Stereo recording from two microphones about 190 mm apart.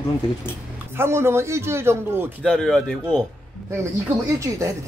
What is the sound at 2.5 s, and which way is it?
Speech, 5° left (ahead or behind).